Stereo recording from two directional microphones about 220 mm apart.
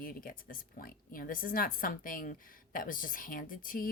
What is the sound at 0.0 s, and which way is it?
A woman's voice, 40° left (ahead or behind).